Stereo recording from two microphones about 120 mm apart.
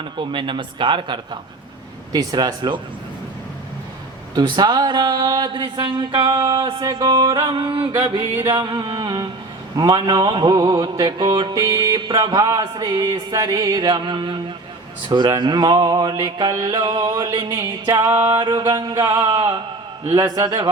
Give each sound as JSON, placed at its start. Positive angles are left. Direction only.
{"t": 0.2, "sound": "a man's voice", "side_deg": -45}
{"t": 2.1, "sound": "mantra", "side_deg": -35}
{"t": 4.4, "sound": "mantra", "side_deg": -35}
{"t": 6.3, "sound": "music", "side_deg": -25}
{"t": 6.8, "sound": "mantra", "side_deg": -35}
{"t": 8.1, "sound": "music", "side_deg": -25}
{"t": 8.5, "sound": "mantra", "side_deg": -40}
{"t": 18.3, "sound": "mantra", "side_deg": -35}